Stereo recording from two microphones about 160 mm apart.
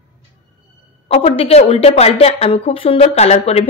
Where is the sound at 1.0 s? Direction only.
35° left (ahead or behind).